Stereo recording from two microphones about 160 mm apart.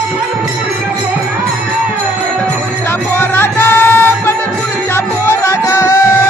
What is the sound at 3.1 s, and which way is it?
Music, 15° left (ahead or behind).